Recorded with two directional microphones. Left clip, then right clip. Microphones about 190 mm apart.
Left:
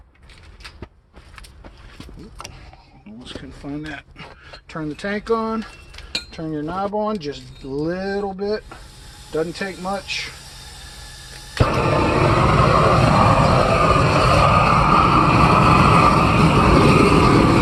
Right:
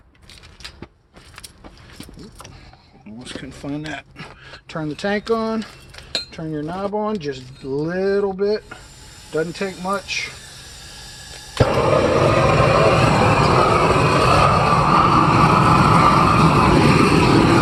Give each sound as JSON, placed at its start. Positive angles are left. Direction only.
{"t": 3.2, "sound": "speech", "side_deg": -50}
{"t": 6.3, "sound": "speech", "side_deg": -25}
{"t": 11.5, "sound": "vehicle", "side_deg": 0}
{"t": 14.5, "sound": "a sound", "side_deg": -10}
{"t": 14.9, "sound": "vehicle", "side_deg": -5}